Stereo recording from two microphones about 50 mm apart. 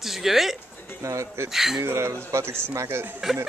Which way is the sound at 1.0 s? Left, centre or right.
Right.